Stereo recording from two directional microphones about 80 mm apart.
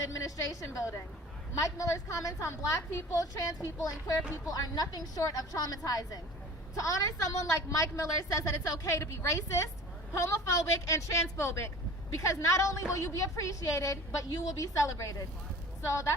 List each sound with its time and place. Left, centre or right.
0.0 s a woman's voice: left